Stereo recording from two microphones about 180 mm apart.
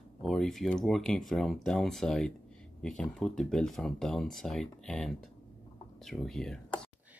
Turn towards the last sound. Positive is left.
turn(degrees=5)  # may be behind; listen again after turning